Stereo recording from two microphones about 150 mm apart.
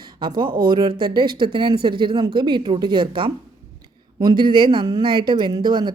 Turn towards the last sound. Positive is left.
turn(degrees=-30)  # may be behind; listen again after turning